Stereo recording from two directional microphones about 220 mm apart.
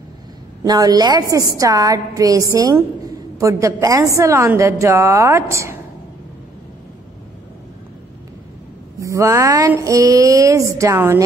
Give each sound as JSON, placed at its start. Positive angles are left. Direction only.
{"t": 0.7, "sound": "a woman's voice", "side_deg": -15}
{"t": 9.0, "sound": "a woman's voice", "side_deg": -15}